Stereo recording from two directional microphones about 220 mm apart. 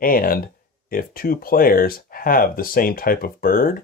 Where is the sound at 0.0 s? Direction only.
40° left (ahead or behind).